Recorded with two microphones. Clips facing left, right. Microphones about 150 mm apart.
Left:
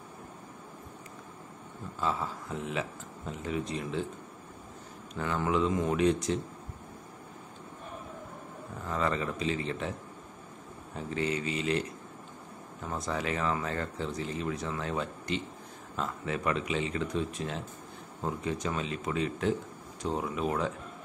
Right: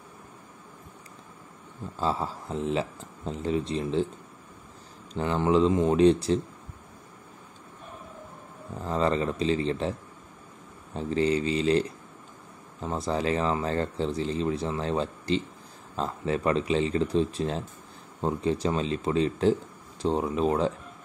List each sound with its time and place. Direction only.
2.0 s speech: 30° right (ahead or behind)
5.1 s speech: 25° right (ahead or behind)
8.8 s speech: 30° right (ahead or behind)
11.0 s speech: 30° right (ahead or behind)